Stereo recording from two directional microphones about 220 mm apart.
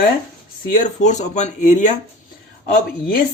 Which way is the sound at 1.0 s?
30° left (ahead or behind).